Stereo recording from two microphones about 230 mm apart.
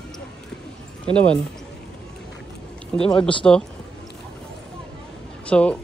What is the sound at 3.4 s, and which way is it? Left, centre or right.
Speech, centre.